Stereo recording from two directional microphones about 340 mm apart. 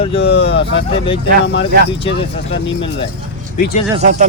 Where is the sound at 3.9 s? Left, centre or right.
Centre.